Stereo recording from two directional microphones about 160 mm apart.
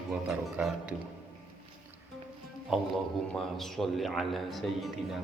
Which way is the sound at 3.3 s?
Centre (ahead or behind).